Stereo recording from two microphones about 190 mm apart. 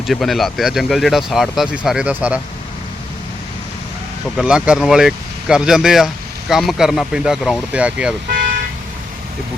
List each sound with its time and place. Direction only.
0.1 s speech: centre (ahead or behind)
4.4 s speech: 5° right (ahead or behind)
8.3 s vehicle: 45° right (ahead or behind)